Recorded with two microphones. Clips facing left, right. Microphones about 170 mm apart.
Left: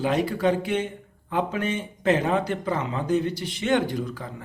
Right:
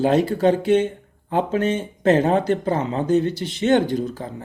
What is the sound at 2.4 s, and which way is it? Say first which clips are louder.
Speech: right 6 dB; 30° right (ahead or behind).